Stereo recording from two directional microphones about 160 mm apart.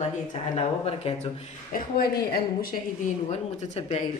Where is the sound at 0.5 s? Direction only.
40° left (ahead or behind).